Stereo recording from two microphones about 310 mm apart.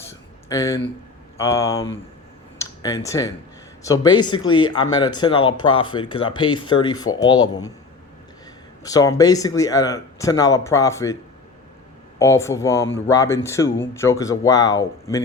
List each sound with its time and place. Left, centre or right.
0.4 s speech: centre
8.8 s speech: centre
12.2 s speech: centre